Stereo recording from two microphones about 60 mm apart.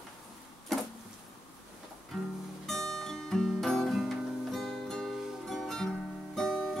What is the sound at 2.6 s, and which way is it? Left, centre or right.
Music, centre.